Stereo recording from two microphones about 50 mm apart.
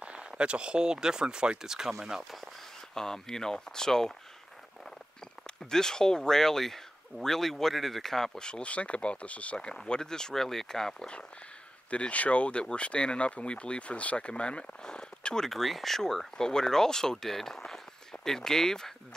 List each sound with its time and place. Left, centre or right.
0.0 s speech: right; by 2.2 s centre
2.9 s speech: centre
5.7 s speech: centre
11.9 s speech: left; by 18.9 s centre